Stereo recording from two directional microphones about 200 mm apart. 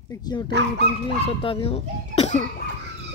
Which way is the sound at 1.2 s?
30° left (ahead or behind).